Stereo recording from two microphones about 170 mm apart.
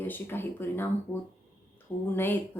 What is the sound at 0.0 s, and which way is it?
A woman's voice, 10° left (ahead or behind).